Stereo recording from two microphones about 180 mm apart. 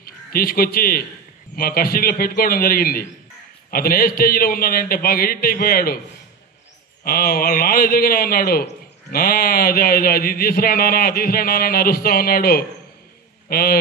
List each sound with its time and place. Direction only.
0.0 s a man's voice: 55° left (ahead or behind)
7.1 s a man's voice: 55° left (ahead or behind)